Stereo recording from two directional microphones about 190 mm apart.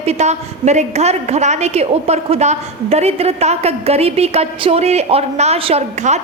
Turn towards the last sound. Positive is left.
turn(degrees=-35)  # may be behind; listen again after turning